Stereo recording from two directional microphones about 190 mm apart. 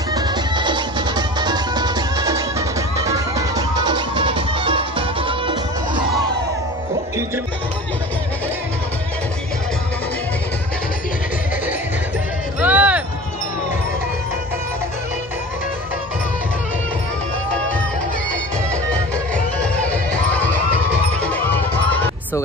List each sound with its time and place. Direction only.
0.1 s music: 20° right (ahead or behind)
12.5 s music: 5° right (ahead or behind)
18.9 s music: 5° left (ahead or behind)